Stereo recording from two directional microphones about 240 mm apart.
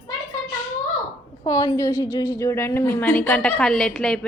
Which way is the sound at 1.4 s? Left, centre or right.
Centre.